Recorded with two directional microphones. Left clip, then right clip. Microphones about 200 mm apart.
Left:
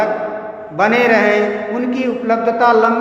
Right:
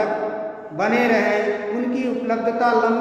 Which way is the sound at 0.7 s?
25° left (ahead or behind).